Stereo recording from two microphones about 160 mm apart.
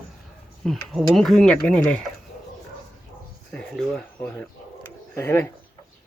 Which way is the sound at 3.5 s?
5° left (ahead or behind).